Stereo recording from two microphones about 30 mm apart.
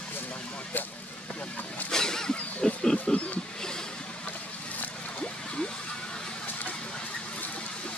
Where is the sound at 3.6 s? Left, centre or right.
Left.